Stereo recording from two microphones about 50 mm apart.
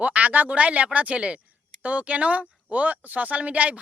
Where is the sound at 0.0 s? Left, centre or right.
Right.